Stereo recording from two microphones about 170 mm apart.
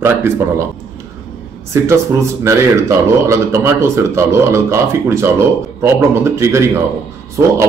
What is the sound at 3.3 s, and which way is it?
Speech, 15° right (ahead or behind).